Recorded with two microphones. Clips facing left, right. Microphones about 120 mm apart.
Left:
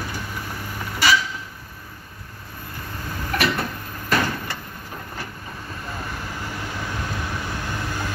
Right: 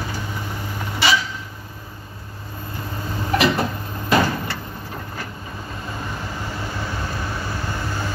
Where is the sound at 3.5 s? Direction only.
25° right (ahead or behind).